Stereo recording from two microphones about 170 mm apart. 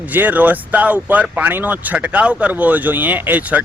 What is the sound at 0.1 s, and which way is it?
Speech, 10° right (ahead or behind).